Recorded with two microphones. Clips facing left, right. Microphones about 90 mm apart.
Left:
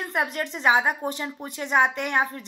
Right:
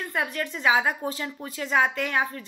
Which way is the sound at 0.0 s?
20° left (ahead or behind).